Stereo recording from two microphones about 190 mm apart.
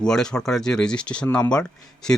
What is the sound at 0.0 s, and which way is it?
Speech, 5° left (ahead or behind).